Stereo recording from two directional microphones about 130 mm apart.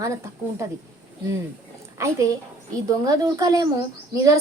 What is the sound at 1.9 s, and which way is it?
Speech, 25° right (ahead or behind).